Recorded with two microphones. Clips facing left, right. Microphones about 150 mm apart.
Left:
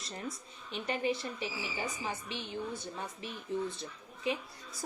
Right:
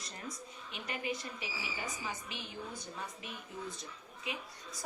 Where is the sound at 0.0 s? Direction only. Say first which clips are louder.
Left 4 dB; 30° left (ahead or behind).